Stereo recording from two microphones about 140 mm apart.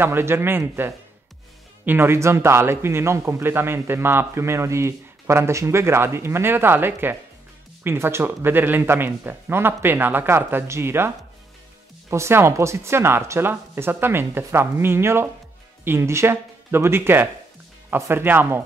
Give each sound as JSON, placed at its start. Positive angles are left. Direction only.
{"t": 0.0, "sound": "a man's voice", "side_deg": -15}